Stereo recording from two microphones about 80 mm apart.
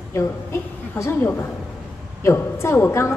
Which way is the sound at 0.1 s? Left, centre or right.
Left.